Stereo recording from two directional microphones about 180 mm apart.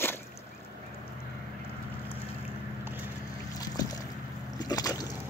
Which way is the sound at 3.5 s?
20° left (ahead or behind).